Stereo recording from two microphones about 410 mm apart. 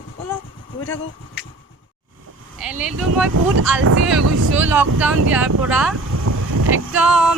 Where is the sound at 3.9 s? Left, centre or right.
Right.